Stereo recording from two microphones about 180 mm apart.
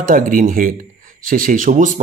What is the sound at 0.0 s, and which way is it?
Speech, 50° right (ahead or behind).